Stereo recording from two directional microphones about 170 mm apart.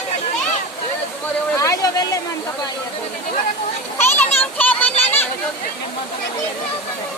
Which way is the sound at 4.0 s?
15° left (ahead or behind).